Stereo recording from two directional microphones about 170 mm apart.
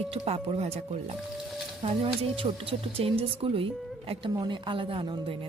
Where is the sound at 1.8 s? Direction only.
35° right (ahead or behind).